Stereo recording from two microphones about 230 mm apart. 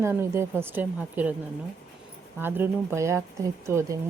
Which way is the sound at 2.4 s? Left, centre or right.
Centre.